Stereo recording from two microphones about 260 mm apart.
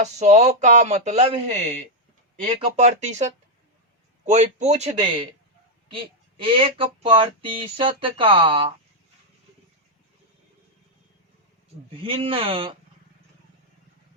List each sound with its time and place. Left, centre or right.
0.0 s speech: right
2.7 s speech: right
4.3 s speech: right
11.9 s speech: right